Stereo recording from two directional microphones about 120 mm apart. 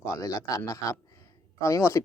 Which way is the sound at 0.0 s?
25° left (ahead or behind).